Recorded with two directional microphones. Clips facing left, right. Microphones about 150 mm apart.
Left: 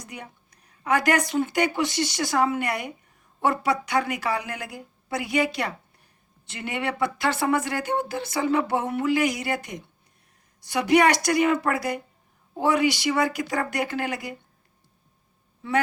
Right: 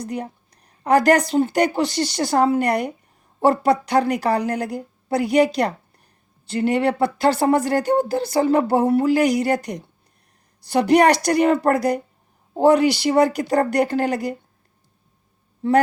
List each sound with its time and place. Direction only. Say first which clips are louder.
0.0 s speech: right 12 dB; 35° right (ahead or behind)